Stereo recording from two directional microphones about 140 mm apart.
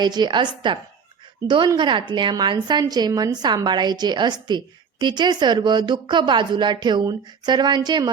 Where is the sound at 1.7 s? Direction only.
35° right (ahead or behind).